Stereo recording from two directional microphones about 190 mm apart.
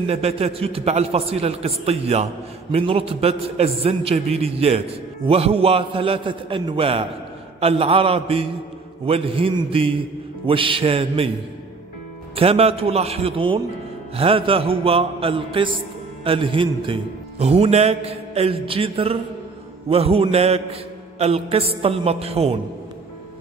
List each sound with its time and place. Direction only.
0.0 s a man's voice: 30° right (ahead or behind)
12.4 s a man's voice: 30° right (ahead or behind)